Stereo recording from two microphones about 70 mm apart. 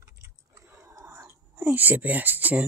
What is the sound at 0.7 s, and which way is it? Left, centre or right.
Whispering, right.